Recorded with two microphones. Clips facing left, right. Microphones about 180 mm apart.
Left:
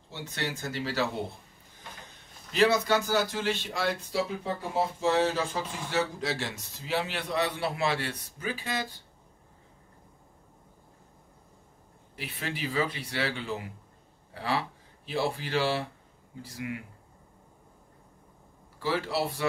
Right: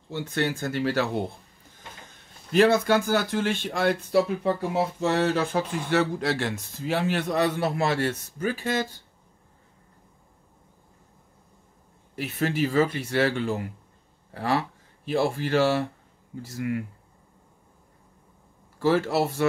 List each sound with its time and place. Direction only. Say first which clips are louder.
0.1 s speech: right 8 dB; 55° right (ahead or behind)
2.5 s speech: right 5 dB; 50° right (ahead or behind)
12.2 s speech: right 10 dB; 45° right (ahead or behind)
18.8 s speech: right 7 dB; 45° right (ahead or behind)